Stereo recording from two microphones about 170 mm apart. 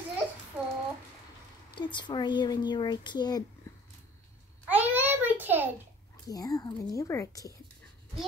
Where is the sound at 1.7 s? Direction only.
25° left (ahead or behind).